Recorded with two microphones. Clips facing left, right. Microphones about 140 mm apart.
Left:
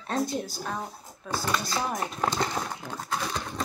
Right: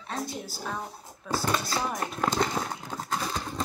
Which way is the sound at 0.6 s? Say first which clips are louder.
Left 1 dB; 10° left (ahead or behind).